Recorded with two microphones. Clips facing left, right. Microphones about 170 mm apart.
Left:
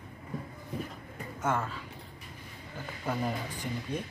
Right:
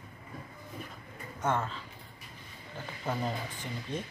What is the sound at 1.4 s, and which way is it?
Speech, 10° left (ahead or behind).